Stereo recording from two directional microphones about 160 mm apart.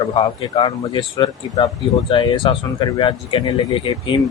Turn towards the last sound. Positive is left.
turn(degrees=30)  # may be behind; listen again after turning